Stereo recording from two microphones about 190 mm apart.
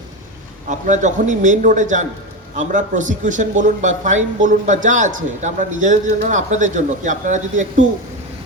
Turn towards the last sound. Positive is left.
turn(degrees=-40)  # may be behind; listen again after turning